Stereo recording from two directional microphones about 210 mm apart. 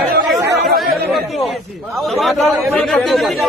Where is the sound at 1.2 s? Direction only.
Centre (ahead or behind).